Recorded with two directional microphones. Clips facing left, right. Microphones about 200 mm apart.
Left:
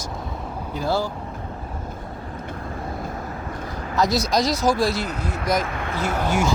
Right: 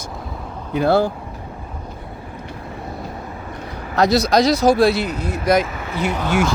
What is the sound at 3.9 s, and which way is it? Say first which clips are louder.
Speech: right 5 dB; 65° right (ahead or behind).